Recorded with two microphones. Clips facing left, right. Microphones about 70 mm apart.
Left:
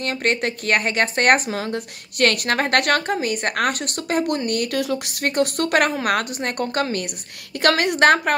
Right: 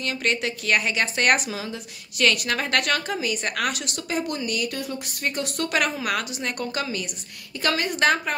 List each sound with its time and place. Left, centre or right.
0.0 s speech: left
4.7 s speech: left
7.6 s a woman's voice: left